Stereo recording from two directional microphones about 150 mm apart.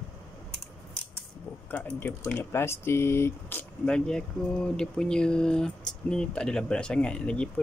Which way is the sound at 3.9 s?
5° left (ahead or behind).